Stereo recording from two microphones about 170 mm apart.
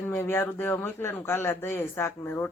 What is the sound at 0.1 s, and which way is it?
Speech, 15° left (ahead or behind).